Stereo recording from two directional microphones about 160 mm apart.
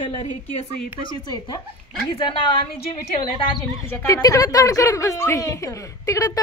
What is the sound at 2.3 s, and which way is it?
A woman's voice, 30° left (ahead or behind).